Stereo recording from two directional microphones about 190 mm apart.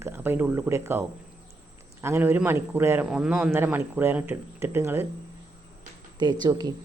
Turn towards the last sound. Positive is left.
turn(degrees=-20)  # may be behind; listen again after turning